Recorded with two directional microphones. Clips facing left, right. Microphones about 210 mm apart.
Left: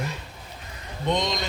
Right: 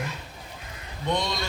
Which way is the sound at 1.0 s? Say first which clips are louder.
Left 2 dB; 20° left (ahead or behind).